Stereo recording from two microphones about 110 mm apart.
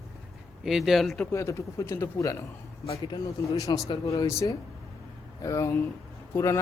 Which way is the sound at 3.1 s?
40° left (ahead or behind).